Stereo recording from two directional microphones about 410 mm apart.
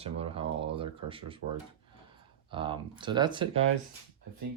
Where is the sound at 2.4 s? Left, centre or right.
Centre.